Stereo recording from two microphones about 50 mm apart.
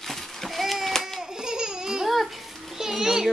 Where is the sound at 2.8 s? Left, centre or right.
Centre.